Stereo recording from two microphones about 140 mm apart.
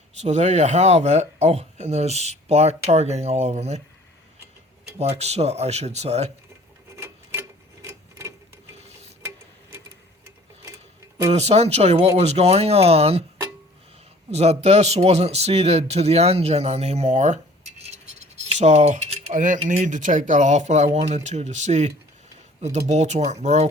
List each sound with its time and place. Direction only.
0.2 s speech: 50° right (ahead or behind)
4.9 s speech: 50° right (ahead or behind)
6.9 s clock: 20° right (ahead or behind)
8.8 s a sound: 50° right (ahead or behind)
10.7 s a sound: 20° right (ahead or behind)
11.3 s speech: 50° right (ahead or behind)
14.3 s speech: 50° right (ahead or behind)